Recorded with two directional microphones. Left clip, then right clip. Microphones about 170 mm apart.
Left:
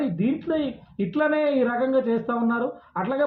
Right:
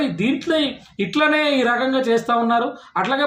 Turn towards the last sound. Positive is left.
turn(degrees=-20)  # may be behind; listen again after turning